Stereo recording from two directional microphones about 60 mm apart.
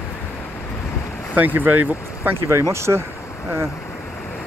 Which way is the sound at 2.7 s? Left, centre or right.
Right.